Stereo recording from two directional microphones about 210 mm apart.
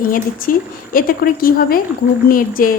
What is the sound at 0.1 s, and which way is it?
A woman's voice, 40° left (ahead or behind).